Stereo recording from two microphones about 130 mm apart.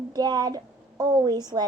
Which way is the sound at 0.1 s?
30° right (ahead or behind).